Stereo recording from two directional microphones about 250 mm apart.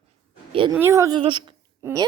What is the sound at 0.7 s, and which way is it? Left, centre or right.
A woman's voice, centre.